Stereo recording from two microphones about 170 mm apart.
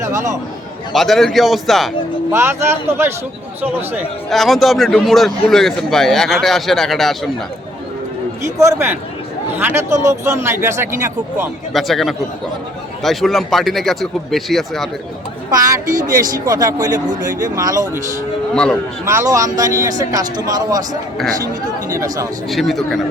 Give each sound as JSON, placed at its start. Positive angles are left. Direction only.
{"t": 0.0, "sound": "speech", "side_deg": -15}
{"t": 0.9, "sound": "speech", "side_deg": 0}
{"t": 2.3, "sound": "speech", "side_deg": -15}
{"t": 4.3, "sound": "speech", "side_deg": 0}
{"t": 8.4, "sound": "speech", "side_deg": -20}
{"t": 11.7, "sound": "speech", "side_deg": 0}
{"t": 15.4, "sound": "speech", "side_deg": -20}
{"t": 18.5, "sound": "speech", "side_deg": 5}
{"t": 19.0, "sound": "speech", "side_deg": -15}
{"t": 21.8, "sound": "speech", "side_deg": -20}
{"t": 22.4, "sound": "speech", "side_deg": 0}